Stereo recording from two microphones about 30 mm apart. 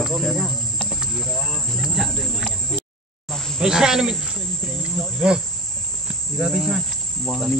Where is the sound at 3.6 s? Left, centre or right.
Centre.